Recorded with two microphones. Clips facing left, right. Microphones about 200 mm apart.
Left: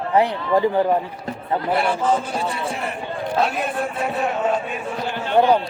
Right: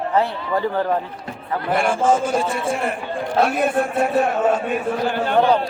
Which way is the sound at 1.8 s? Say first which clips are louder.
Right 6 dB; 45° right (ahead or behind).